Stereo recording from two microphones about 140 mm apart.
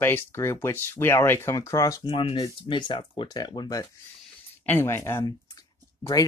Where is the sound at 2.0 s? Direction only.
40° left (ahead or behind).